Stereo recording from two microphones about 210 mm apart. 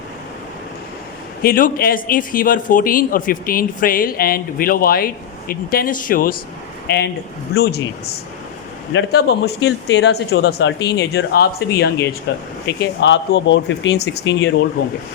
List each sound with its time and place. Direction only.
1.4 s a man's voice: 45° left (ahead or behind); by 14.5 s 60° left (ahead or behind)